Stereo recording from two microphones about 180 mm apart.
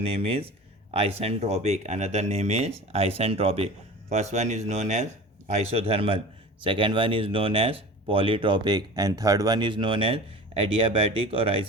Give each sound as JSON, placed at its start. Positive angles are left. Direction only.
{"t": 0.0, "sound": "speech", "side_deg": -30}